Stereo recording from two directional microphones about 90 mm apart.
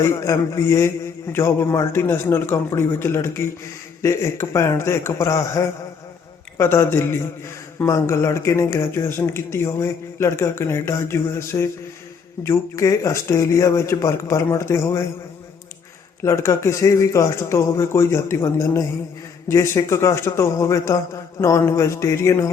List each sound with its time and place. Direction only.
0.0 s a man's voice: 30° left (ahead or behind)
16.2 s a man's voice: 35° left (ahead or behind)